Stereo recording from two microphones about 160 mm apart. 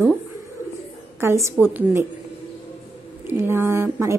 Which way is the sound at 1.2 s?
15° right (ahead or behind).